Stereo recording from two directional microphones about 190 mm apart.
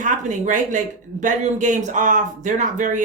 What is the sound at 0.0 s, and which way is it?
A woman's voice, 40° right (ahead or behind).